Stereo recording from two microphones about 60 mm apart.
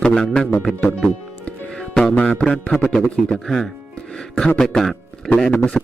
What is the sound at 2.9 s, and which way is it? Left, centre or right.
A man's voice, centre.